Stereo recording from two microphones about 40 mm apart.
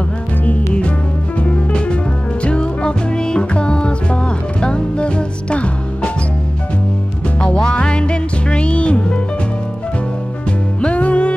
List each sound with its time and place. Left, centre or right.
1.4 s music: left
7.3 s music: left
10.8 s music: left